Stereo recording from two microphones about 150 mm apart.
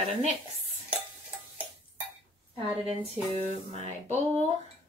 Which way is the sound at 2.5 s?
40° right (ahead or behind).